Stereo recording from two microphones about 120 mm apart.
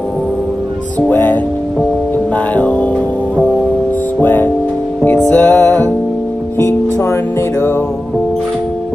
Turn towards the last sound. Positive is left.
turn(degrees=20)  # may be behind; listen again after turning